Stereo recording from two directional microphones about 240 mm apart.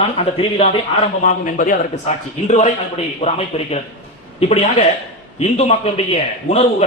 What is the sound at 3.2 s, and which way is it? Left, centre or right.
A man's voice, left.